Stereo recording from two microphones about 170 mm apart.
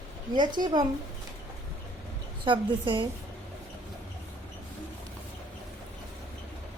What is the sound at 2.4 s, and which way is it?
Speech, 30° right (ahead or behind).